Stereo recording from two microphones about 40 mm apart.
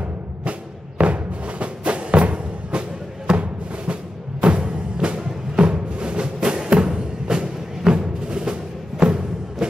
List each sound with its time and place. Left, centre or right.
0.4 s music: right